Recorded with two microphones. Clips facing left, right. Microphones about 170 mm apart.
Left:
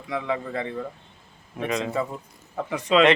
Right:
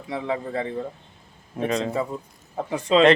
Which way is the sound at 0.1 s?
35° right (ahead or behind).